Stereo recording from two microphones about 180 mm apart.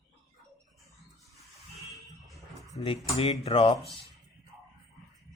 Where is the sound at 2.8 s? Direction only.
30° left (ahead or behind).